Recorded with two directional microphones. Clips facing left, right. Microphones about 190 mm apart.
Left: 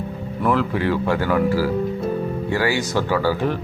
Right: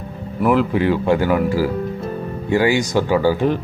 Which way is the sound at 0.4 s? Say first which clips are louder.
Right 4 dB; 15° right (ahead or behind).